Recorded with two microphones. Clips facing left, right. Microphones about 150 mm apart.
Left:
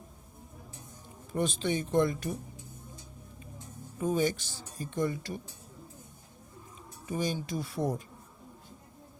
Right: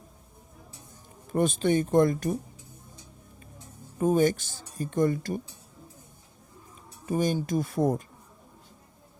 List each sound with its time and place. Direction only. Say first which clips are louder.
1.3 s speech: right 6 dB; 50° right (ahead or behind)
4.0 s speech: right 6 dB; 50° right (ahead or behind)
7.0 s speech: right 6 dB; 50° right (ahead or behind)